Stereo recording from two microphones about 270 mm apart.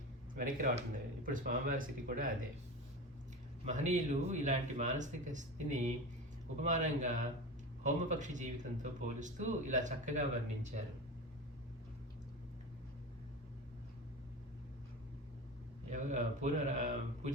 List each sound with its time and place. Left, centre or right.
0.3 s speech: right
3.7 s speech: right
15.9 s speech: right